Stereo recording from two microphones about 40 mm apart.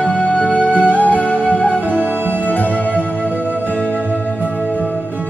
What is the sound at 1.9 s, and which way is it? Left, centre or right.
Music, right.